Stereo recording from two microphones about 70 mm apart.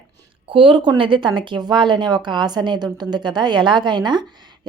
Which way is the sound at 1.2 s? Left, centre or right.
Right.